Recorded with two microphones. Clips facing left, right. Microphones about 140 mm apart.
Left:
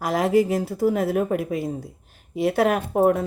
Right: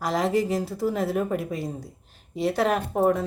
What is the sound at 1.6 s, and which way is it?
Speech, centre (ahead or behind).